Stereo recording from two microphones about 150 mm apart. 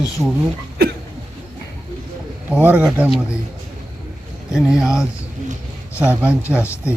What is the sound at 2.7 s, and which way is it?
Speech, 10° right (ahead or behind).